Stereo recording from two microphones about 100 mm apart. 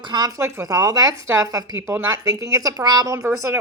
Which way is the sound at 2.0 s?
40° right (ahead or behind).